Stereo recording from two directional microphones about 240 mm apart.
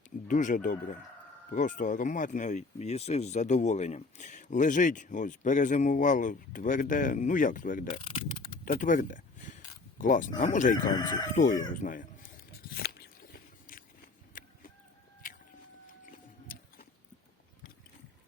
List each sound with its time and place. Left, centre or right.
0.3 s speech: left
7.9 s speech: left
8.6 s a sound: left
10.4 s speech: left
11.7 s a sound: left
16.0 s music: left